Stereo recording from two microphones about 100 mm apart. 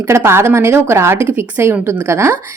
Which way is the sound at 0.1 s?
25° right (ahead or behind).